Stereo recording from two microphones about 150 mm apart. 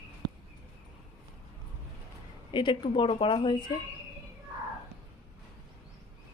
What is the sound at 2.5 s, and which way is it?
A woman's voice, 30° left (ahead or behind).